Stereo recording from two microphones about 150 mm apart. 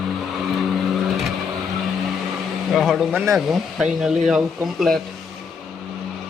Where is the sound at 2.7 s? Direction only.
Centre (ahead or behind).